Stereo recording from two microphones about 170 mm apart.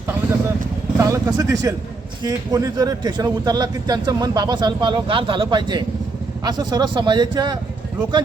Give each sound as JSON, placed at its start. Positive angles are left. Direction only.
{"t": 0.9, "sound": "speech", "side_deg": -20}